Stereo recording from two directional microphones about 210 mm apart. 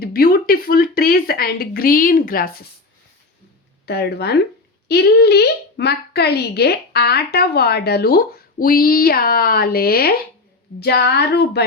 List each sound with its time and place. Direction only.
0.0 s a woman's voice: 45° left (ahead or behind)
3.8 s a woman's voice: 50° left (ahead or behind)